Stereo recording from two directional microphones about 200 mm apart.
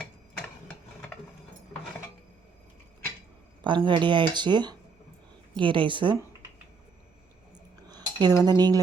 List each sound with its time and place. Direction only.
3.6 s speech: 25° right (ahead or behind)
7.9 s cutlery: 20° right (ahead or behind)